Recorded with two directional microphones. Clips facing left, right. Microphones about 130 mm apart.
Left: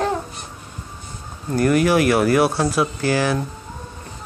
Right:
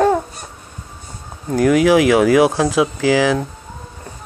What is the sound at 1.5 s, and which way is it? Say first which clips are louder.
Speech: right 4 dB; 90° right.